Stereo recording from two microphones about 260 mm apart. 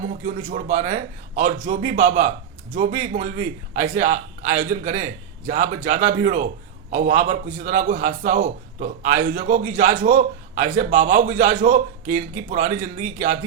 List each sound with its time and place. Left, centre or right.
0.1 s a man's voice: right